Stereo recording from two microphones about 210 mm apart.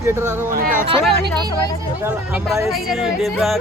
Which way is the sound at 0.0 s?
10° right (ahead or behind).